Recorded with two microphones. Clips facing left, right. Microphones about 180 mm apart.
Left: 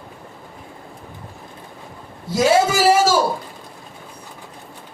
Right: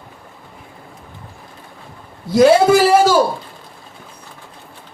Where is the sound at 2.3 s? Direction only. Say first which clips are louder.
Right 6 dB; 60° right (ahead or behind).